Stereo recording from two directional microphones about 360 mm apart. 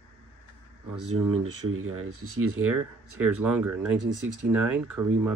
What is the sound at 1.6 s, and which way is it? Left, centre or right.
Speech, right.